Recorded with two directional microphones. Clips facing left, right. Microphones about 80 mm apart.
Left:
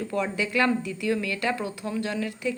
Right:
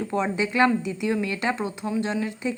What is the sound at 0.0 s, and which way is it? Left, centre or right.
A woman's voice, right.